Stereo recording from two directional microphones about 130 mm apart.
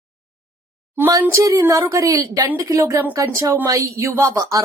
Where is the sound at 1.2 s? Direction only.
25° right (ahead or behind).